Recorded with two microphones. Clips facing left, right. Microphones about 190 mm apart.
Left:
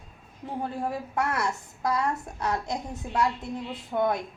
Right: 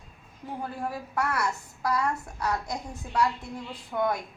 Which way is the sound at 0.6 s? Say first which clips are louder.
Left 3 dB; 25° left (ahead or behind).